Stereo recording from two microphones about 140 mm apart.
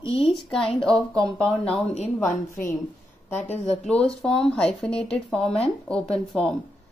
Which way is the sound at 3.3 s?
50° left (ahead or behind).